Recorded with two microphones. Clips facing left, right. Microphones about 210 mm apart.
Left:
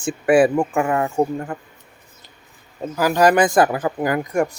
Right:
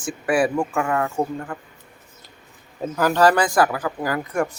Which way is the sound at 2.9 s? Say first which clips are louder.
Left 2 dB; 10° left (ahead or behind).